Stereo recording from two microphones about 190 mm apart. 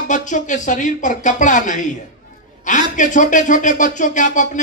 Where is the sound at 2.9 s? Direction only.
40° left (ahead or behind).